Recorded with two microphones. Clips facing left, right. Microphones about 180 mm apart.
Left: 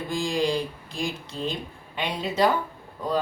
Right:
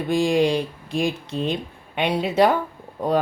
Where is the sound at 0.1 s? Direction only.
65° right (ahead or behind).